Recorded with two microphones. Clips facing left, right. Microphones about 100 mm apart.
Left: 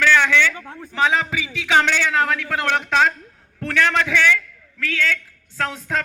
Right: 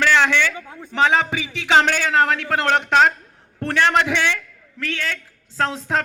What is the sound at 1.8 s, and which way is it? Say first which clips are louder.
Speech: right 1 dB; 40° right (ahead or behind).